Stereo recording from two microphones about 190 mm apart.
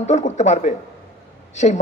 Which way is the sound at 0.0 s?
40° left (ahead or behind).